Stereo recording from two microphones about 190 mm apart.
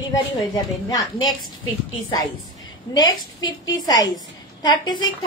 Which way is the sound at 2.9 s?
20° left (ahead or behind).